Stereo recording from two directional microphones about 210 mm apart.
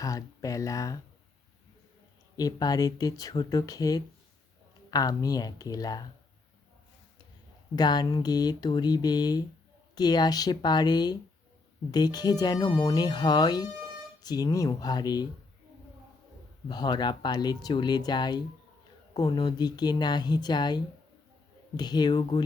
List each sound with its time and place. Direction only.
0.0 s speech: 15° left (ahead or behind)
2.3 s speech: 20° left (ahead or behind)
7.8 s speech: 20° left (ahead or behind)
16.6 s speech: 20° left (ahead or behind)